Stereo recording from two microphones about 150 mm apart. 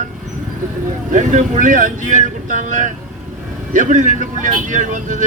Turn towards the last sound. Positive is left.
turn(degrees=-55)  # may be behind; listen again after turning